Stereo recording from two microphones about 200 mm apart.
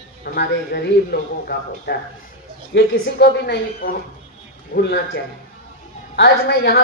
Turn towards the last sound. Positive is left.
turn(degrees=55)  # may be behind; listen again after turning